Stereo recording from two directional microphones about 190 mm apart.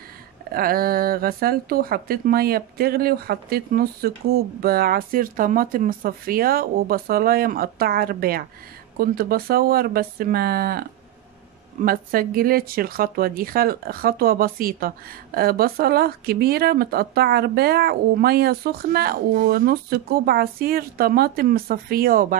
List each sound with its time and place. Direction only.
0.5 s speech: 50° right (ahead or behind)